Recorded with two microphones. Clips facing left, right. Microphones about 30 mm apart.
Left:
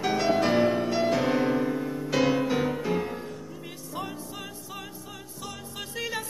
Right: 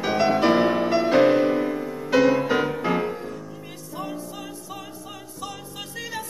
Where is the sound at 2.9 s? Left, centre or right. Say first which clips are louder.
Right 6 dB; right.